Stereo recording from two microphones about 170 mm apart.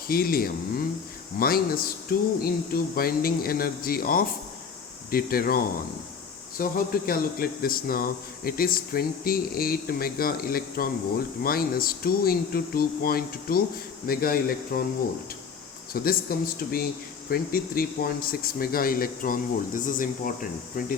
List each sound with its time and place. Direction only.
0.1 s speech: 60° left (ahead or behind)
15.9 s speech: 60° left (ahead or behind)